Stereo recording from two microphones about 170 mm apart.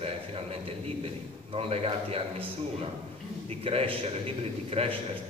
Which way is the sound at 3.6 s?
35° right (ahead or behind).